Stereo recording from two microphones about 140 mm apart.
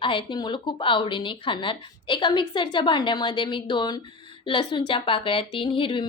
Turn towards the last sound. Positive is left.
turn(degrees=40)  # may be behind; listen again after turning